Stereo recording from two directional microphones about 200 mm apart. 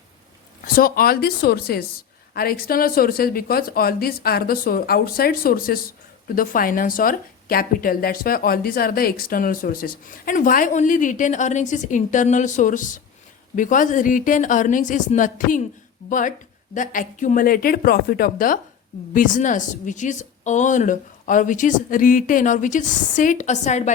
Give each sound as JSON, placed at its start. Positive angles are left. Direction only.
{"t": 0.6, "sound": "a woman's voice", "side_deg": 45}